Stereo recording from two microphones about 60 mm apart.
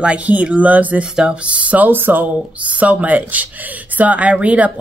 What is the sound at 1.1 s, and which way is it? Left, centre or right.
Speech, centre.